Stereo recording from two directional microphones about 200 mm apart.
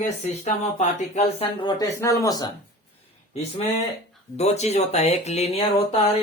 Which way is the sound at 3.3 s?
30° left (ahead or behind).